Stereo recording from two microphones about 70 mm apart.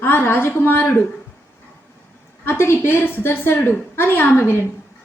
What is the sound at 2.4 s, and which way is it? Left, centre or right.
A woman's voice, left.